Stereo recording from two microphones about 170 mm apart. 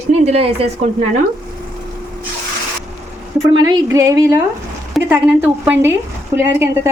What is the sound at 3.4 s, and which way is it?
A woman's voice, 20° right (ahead or behind).